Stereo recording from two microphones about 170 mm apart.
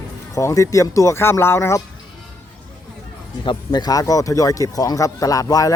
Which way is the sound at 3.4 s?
25° left (ahead or behind).